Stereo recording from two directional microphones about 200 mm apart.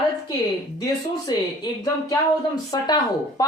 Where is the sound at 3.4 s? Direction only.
20° left (ahead or behind).